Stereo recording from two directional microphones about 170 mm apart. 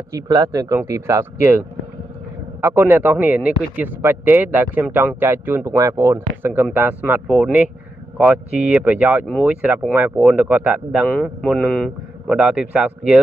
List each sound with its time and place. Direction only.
0.1 s speech: 20° right (ahead or behind)
2.6 s speech: 10° right (ahead or behind)
11.1 s a man's voice: 10° left (ahead or behind)
12.3 s a man's voice: 5° right (ahead or behind)